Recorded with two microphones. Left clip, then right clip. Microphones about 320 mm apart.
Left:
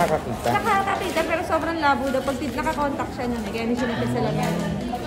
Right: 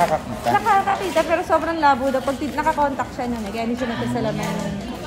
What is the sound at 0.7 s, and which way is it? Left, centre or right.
Speech, centre.